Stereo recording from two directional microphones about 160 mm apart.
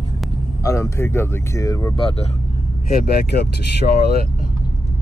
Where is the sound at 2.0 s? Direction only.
35° left (ahead or behind).